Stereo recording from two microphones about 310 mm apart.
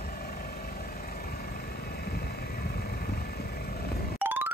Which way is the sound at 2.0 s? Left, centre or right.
Left.